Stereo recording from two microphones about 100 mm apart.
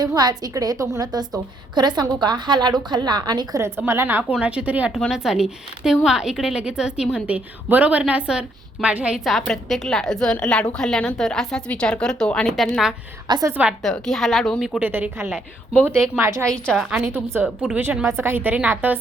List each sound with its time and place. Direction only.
0.0 s a woman's voice: 45° right (ahead or behind)
3.8 s a woman's voice: 20° right (ahead or behind); by 12.8 s 5° left (ahead or behind)
13.5 s a woman's voice: 15° right (ahead or behind)
13.8 s a woman's voice: 5° left (ahead or behind)
14.8 s a woman's voice: 15° right (ahead or behind)
16.1 s a woman's voice: 30° right (ahead or behind)
16.5 s a woman's voice: 10° left (ahead or behind)
17.4 s a woman's voice: 15° right (ahead or behind)